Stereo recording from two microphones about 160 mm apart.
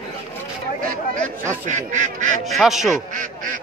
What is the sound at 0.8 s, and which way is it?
Speech, 55° right (ahead or behind).